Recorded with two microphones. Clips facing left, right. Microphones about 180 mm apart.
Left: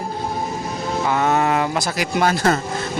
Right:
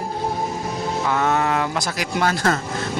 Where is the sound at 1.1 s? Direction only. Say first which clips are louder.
Left 2 dB; 10° left (ahead or behind).